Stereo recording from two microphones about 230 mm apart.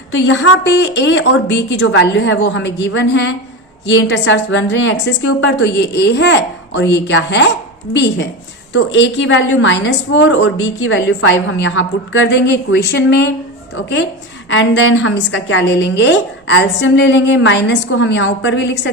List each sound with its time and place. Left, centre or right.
0.1 s a woman's voice: left
14.5 s a woman's voice: left